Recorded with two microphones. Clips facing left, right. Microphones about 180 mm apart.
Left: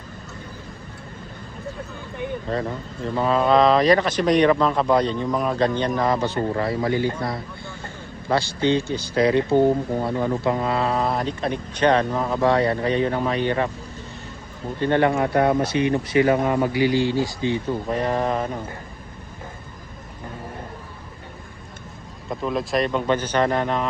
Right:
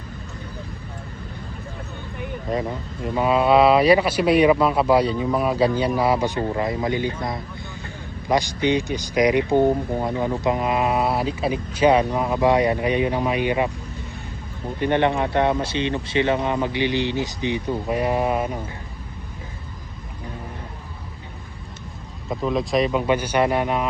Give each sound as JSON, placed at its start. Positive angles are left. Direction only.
{"t": 2.5, "sound": "speech", "side_deg": -10}
{"t": 8.3, "sound": "speech", "side_deg": -15}
{"t": 14.8, "sound": "speech", "side_deg": -20}
{"t": 22.3, "sound": "speech", "side_deg": 0}